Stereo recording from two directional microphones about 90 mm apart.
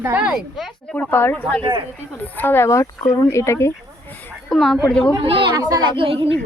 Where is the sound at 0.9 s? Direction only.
25° left (ahead or behind).